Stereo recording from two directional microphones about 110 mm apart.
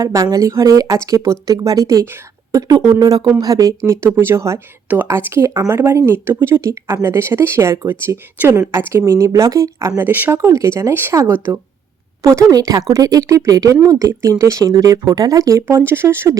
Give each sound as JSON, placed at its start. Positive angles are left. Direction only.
{"t": 0.0, "sound": "speech", "side_deg": -30}
{"t": 3.8, "sound": "speech", "side_deg": -20}
{"t": 10.1, "sound": "speech", "side_deg": -15}
{"t": 10.3, "sound": "speech", "side_deg": -30}